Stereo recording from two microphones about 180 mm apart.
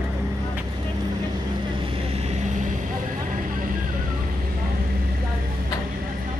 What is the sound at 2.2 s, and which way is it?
Vehicle, 40° right (ahead or behind).